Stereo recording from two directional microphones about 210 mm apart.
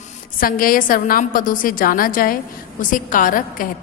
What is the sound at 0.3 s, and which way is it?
A woman's voice, 45° left (ahead or behind).